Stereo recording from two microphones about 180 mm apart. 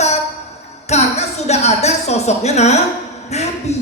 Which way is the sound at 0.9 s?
40° left (ahead or behind).